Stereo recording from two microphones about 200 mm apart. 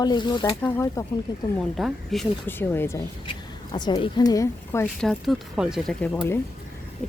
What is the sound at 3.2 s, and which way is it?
A woman's voice, 25° left (ahead or behind).